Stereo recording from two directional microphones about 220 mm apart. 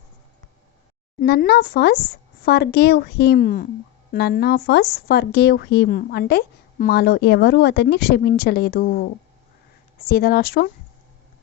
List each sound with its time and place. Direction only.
1.2 s a woman's voice: 45° left (ahead or behind)